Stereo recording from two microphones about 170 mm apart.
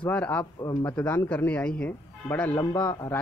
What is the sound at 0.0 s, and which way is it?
Speech, 10° left (ahead or behind).